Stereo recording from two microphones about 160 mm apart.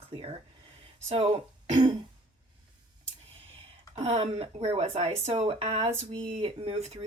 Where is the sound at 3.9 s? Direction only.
40° right (ahead or behind).